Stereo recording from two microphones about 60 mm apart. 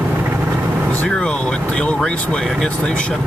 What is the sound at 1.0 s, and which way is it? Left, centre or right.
Speech, centre.